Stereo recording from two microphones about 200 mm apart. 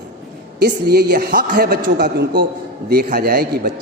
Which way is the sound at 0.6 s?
55° right (ahead or behind).